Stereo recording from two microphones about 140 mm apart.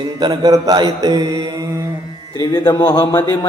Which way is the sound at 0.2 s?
30° right (ahead or behind).